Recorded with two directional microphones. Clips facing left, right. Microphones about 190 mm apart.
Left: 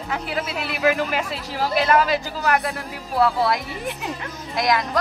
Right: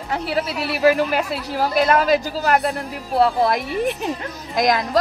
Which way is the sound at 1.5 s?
45° right (ahead or behind).